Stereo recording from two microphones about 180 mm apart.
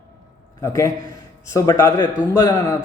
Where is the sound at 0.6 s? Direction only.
15° left (ahead or behind).